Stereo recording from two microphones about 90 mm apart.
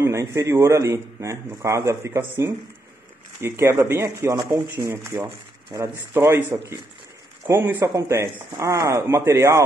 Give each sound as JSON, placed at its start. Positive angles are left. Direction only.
{"t": 0.0, "sound": "speech", "side_deg": -35}
{"t": 6.5, "sound": "a man's voice", "side_deg": -30}